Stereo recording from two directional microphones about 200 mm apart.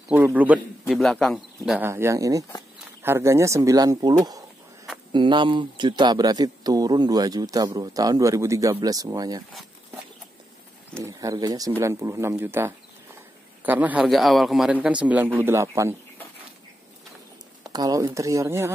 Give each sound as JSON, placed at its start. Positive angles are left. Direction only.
{"t": 0.1, "sound": "speech", "side_deg": -10}
{"t": 1.7, "sound": "a man's voice", "side_deg": -10}
{"t": 5.1, "sound": "speech", "side_deg": -25}
{"t": 11.0, "sound": "a man's voice", "side_deg": -15}
{"t": 17.6, "sound": "a man's voice", "side_deg": -20}